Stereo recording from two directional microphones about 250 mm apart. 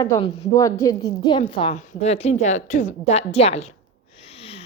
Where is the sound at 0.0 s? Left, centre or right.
Centre.